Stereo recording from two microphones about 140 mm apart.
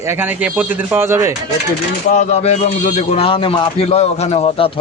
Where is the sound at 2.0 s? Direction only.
55° left (ahead or behind).